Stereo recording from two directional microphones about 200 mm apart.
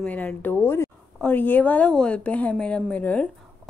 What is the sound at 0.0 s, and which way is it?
Speech, 10° left (ahead or behind).